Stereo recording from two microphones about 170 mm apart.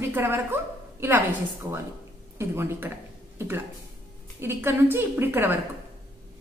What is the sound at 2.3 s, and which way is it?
A woman's voice, 15° right (ahead or behind).